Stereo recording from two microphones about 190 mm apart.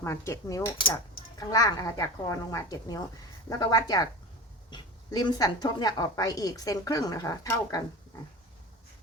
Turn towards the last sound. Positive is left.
turn(degrees=20)  # may be behind; listen again after turning